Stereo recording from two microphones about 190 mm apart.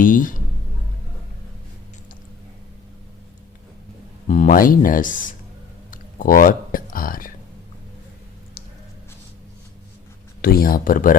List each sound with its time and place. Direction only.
0.0 s a sound: 45° left (ahead or behind)
4.3 s speech: 45° left (ahead or behind)
5.9 s whispering: 45° left (ahead or behind)
10.4 s speech: 50° left (ahead or behind)